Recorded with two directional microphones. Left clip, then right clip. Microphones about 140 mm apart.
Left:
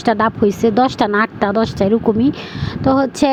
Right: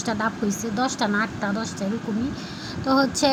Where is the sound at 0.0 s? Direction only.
55° left (ahead or behind).